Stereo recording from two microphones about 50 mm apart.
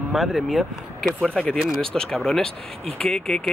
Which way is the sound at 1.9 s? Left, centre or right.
Centre.